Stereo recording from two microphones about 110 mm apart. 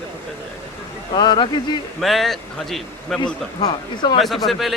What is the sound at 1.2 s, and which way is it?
Speech, 45° left (ahead or behind).